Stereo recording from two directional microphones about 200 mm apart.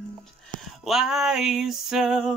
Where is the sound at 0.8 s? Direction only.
Centre (ahead or behind).